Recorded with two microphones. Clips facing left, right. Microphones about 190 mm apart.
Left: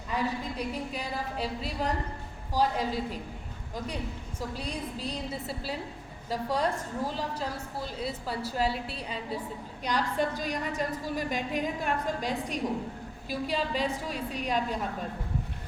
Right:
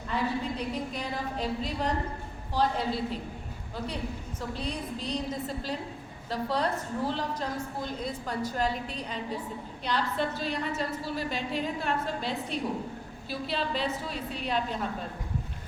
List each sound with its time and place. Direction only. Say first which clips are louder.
0.1 s a woman's voice: right 1 dB; 10° left (ahead or behind)
4.4 s a woman's voice: even; 10° left (ahead or behind)
11.2 s a woman's voice: left 1 dB; 45° left (ahead or behind)
11.6 s a woman's voice: even; 15° left (ahead or behind)
13.5 s a woman's voice: even; 10° left (ahead or behind)